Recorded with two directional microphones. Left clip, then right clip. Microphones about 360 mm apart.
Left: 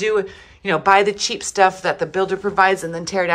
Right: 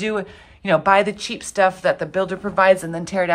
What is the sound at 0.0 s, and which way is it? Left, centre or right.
A woman's voice, centre.